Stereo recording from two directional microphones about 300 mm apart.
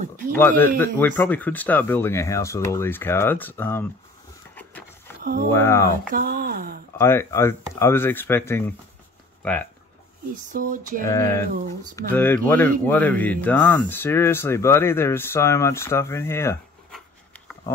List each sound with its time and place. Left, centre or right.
0.3 s speech: centre
4.6 s a sound: centre
5.5 s speech: centre
6.1 s speech: right
7.0 s speech: centre
10.5 s speech: right
11.1 s speech: centre